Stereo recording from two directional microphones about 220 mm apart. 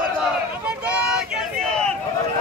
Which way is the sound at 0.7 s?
5° right (ahead or behind).